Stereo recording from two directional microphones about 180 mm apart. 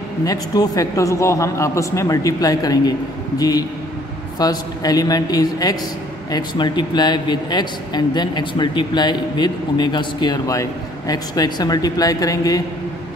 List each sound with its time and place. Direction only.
0.2 s a man's voice: 20° left (ahead or behind)